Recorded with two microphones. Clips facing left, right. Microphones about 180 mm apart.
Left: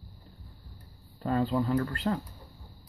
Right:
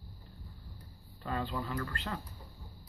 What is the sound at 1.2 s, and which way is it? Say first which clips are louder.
Speech: left 9 dB; 40° left (ahead or behind).